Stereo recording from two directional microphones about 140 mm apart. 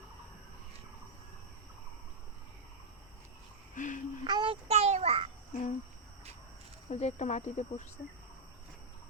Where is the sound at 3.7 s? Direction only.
65° left (ahead or behind).